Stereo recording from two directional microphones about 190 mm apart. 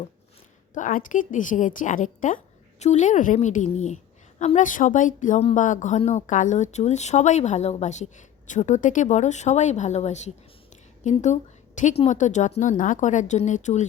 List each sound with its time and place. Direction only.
0.7 s a woman's voice: 45° left (ahead or behind)